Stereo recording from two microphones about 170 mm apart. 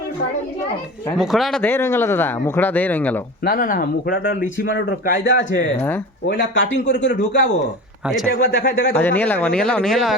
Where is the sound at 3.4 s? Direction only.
60° left (ahead or behind).